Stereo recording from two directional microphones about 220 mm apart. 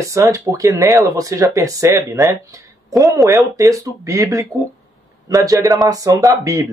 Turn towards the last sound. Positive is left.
turn(degrees=-15)  # may be behind; listen again after turning